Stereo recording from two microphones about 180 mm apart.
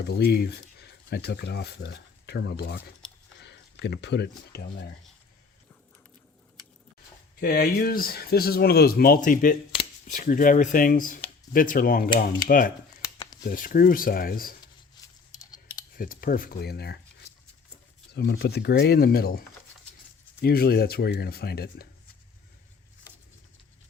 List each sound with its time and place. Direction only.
0.0 s speech: 60° left (ahead or behind)
3.0 s a sound: 5° left (ahead or behind)
3.4 s speech: 70° left (ahead or behind)
7.3 s speech: 55° left (ahead or behind)
16.0 s speech: 50° left (ahead or behind)
18.1 s speech: 60° left (ahead or behind)